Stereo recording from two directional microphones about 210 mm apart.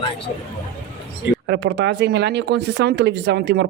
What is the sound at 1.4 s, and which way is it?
Speech, 55° right (ahead or behind).